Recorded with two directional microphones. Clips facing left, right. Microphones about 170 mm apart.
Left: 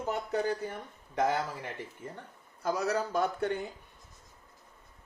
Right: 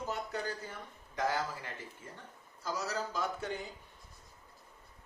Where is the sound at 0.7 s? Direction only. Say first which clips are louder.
Left 5 dB; 65° left (ahead or behind).